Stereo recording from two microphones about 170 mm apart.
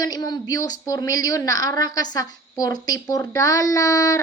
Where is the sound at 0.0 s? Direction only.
20° left (ahead or behind).